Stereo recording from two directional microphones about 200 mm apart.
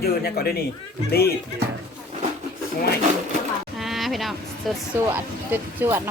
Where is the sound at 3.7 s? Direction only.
Centre (ahead or behind).